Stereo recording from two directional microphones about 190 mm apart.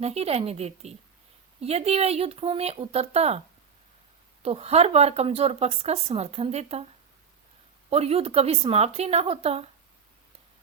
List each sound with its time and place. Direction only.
0.0 s a woman's voice: 35° right (ahead or behind)
4.4 s a woman's voice: 35° right (ahead or behind)
7.9 s a woman's voice: 30° right (ahead or behind)